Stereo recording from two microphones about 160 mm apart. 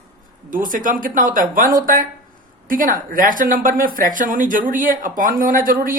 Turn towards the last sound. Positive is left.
turn(degrees=-60)  # may be behind; listen again after turning